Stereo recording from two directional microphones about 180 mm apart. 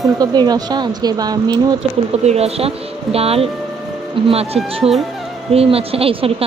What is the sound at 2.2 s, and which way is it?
Speech, 35° right (ahead or behind).